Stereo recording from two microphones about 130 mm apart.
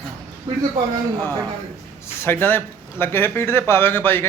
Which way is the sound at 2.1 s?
20° left (ahead or behind).